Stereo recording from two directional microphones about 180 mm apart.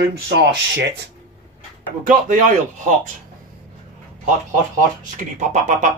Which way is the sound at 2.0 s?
45° right (ahead or behind).